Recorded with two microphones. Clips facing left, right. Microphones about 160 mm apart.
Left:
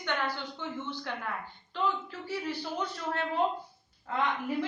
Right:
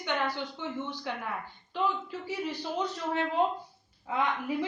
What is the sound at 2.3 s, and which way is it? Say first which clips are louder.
Speech: even; 15° right (ahead or behind).